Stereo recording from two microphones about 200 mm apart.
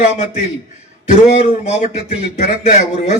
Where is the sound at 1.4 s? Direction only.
30° left (ahead or behind).